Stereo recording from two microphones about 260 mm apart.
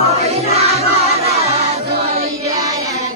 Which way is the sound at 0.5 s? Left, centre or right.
Right.